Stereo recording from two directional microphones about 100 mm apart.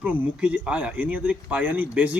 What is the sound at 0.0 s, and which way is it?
Speech, 15° right (ahead or behind).